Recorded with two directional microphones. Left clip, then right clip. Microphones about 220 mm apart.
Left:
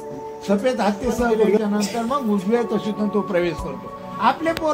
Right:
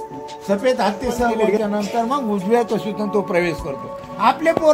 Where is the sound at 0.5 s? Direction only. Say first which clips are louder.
Right 2 dB; 15° right (ahead or behind).